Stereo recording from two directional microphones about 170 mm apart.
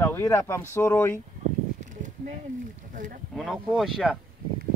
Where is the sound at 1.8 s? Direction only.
45° right (ahead or behind).